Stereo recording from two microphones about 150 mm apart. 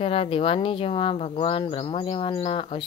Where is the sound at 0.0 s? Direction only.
40° left (ahead or behind).